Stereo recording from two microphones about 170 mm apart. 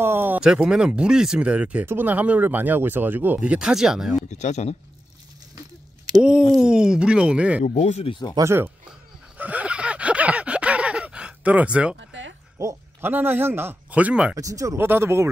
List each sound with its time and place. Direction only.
0.0 s speech: 10° right (ahead or behind)
4.3 s speech: 40° left (ahead or behind)
6.5 s speech: 5° right (ahead or behind)
7.6 s speech: 45° left (ahead or behind); by 8.4 s 30° left (ahead or behind)
8.4 s speech: 15° right (ahead or behind)
9.4 s a sound: 10° right (ahead or behind)
12.0 s a sound: 90° right
12.5 s speech: 15° right (ahead or behind)
14.3 s speech: 20° right (ahead or behind)